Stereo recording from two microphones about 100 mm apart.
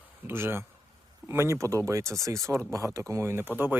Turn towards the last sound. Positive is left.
turn(degrees=-20)  # may be behind; listen again after turning